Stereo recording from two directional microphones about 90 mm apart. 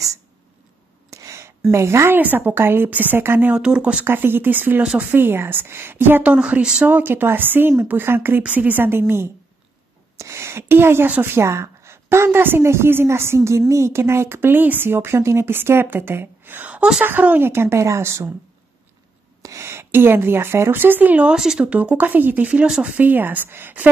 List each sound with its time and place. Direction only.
1.1 s a sound: 35° right (ahead or behind)
1.7 s a woman's voice: 30° right (ahead or behind)
3.5 s speech: 10° right (ahead or behind)
4.0 s a woman's voice: 25° right (ahead or behind)
6.3 s speech: 10° right (ahead or behind)
6.9 s a woman's voice: 20° right (ahead or behind)
19.4 s a woman's voice: 35° right (ahead or behind)